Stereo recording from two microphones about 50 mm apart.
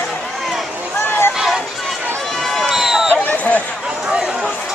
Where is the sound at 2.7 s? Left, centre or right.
Centre.